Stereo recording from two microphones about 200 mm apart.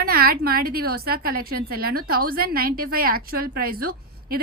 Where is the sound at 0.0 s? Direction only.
50° right (ahead or behind).